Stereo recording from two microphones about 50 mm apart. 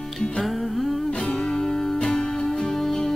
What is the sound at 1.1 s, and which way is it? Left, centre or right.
Music, centre.